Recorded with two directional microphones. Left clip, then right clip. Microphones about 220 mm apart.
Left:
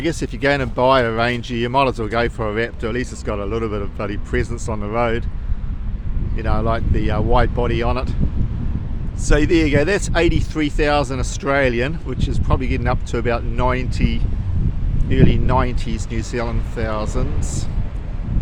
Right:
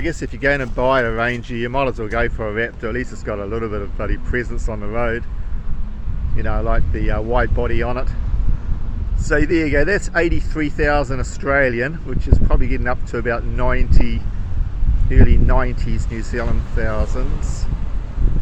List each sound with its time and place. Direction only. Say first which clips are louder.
0.0 s speech: even; 25° left (ahead or behind)
6.4 s speech: left 1 dB; 15° left (ahead or behind)
9.2 s speech: left 1 dB; 5° left (ahead or behind)
15.4 s speech: left 2 dB; 10° left (ahead or behind)